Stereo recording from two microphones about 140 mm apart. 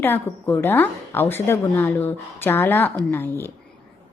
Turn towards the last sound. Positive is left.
turn(degrees=15)  # may be behind; listen again after turning